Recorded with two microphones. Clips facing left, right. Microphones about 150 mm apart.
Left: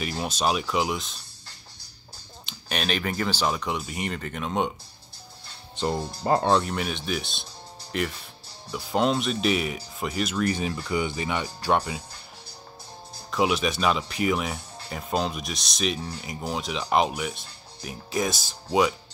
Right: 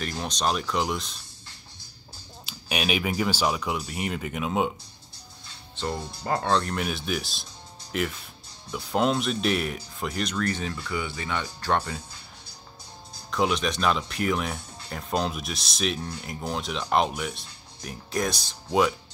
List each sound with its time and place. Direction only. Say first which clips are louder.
0.0 s speech: left 2 dB; 5° left (ahead or behind)
2.4 s speech: right 1 dB; 10° right (ahead or behind)
5.9 s speech: left 6 dB; 35° left (ahead or behind)
6.4 s speech: even; 10° left (ahead or behind)
6.7 s speech: even; centre (ahead or behind)
13.3 s speech: left 1 dB; 5° left (ahead or behind)